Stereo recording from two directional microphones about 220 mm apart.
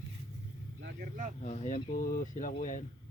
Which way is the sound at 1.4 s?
35° left (ahead or behind).